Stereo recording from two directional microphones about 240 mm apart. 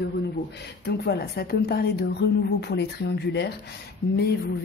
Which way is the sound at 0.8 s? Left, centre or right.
Left.